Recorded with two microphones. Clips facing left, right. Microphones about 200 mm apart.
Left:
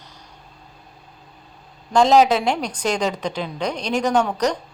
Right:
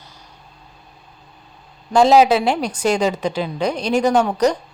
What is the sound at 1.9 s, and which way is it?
A woman's voice, 5° right (ahead or behind).